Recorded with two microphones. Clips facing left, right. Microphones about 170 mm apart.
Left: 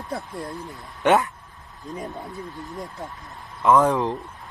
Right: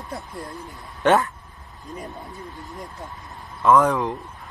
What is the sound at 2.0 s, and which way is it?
Speech, centre (ahead or behind).